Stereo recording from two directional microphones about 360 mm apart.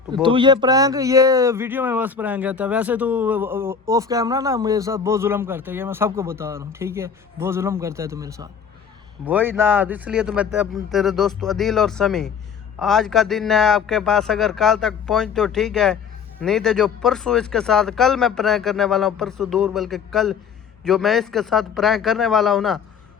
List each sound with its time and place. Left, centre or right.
0.1 s speech: centre